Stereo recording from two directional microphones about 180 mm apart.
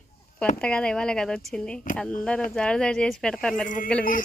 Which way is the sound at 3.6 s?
50° left (ahead or behind).